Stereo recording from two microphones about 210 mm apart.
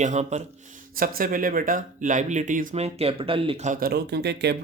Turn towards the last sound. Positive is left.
turn(degrees=-55)  # may be behind; listen again after turning